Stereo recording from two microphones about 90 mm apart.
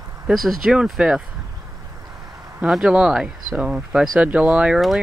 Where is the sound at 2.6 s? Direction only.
10° right (ahead or behind).